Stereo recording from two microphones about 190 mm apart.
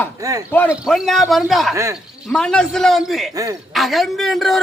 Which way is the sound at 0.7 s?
Centre (ahead or behind).